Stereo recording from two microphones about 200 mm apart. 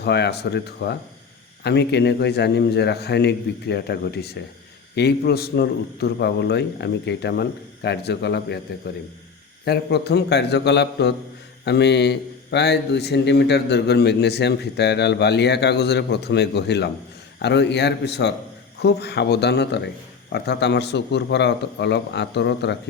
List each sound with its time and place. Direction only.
0.0 s a man's voice: 55° left (ahead or behind)
9.6 s a man's voice: 55° left (ahead or behind)